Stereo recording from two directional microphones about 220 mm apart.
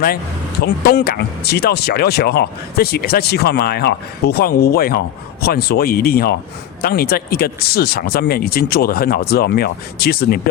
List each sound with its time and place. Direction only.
0.6 s speech: 45° left (ahead or behind)